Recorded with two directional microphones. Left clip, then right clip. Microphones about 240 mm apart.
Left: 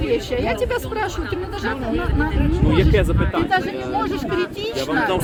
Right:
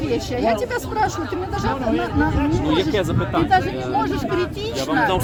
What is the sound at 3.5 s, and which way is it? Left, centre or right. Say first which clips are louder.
Speech: right 2 dB; centre.